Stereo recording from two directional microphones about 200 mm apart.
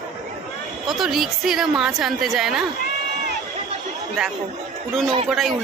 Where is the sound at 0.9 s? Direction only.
Centre (ahead or behind).